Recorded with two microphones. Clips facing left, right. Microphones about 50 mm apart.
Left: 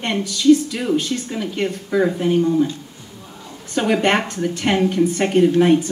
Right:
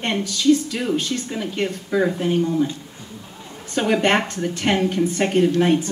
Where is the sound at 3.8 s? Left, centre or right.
Centre.